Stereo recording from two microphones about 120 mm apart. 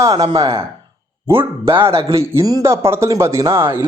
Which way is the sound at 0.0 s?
30° right (ahead or behind).